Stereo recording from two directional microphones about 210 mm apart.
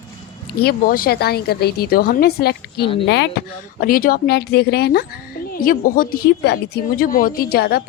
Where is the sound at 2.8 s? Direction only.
25° left (ahead or behind).